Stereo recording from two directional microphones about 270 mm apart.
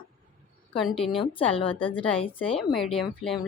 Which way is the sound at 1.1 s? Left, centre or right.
Centre.